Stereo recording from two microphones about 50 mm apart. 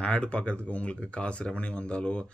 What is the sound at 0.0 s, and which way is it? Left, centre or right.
A man's voice, left.